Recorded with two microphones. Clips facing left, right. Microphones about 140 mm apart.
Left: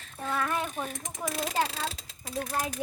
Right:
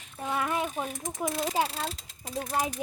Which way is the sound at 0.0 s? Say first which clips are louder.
Right 1 dB; 15° right (ahead or behind).